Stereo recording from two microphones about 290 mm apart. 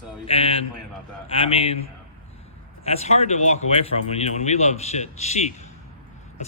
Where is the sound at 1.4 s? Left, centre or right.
Centre.